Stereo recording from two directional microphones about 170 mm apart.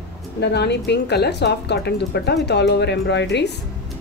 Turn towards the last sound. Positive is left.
turn(degrees=90)